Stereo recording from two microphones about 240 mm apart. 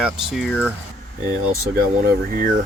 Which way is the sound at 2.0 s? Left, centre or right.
Right.